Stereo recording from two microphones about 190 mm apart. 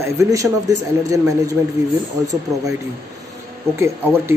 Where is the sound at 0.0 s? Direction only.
15° right (ahead or behind).